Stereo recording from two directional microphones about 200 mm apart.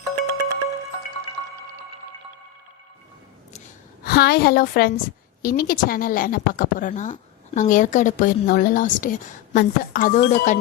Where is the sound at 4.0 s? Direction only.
50° left (ahead or behind).